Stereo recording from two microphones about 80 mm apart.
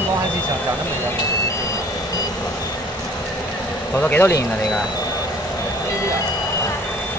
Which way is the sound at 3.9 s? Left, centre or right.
Left.